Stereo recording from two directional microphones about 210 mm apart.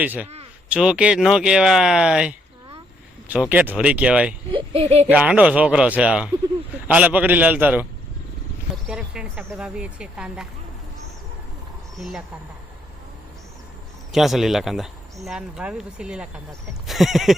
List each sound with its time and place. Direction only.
0.0 s a man's voice: 5° right (ahead or behind)
3.5 s speech: 5° right (ahead or behind)
4.5 s speech: 30° right (ahead or behind)
5.0 s a man's voice: 5° right (ahead or behind)
8.9 s speech: 5° right (ahead or behind)
11.9 s speech: centre (ahead or behind)
14.1 s speech: centre (ahead or behind)